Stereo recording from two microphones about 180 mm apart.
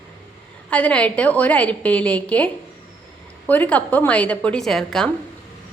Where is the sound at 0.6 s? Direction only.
5° left (ahead or behind).